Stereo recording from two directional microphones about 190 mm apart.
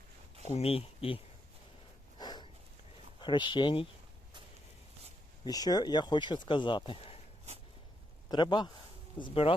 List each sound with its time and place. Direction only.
0.4 s speech: 35° left (ahead or behind)
2.1 s a sound: 20° left (ahead or behind)
3.2 s speech: 25° left (ahead or behind)
5.5 s speech: 20° left (ahead or behind)
8.3 s speech: 25° left (ahead or behind)